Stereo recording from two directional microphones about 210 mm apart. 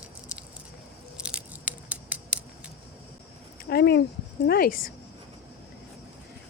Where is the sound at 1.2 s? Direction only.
5° right (ahead or behind).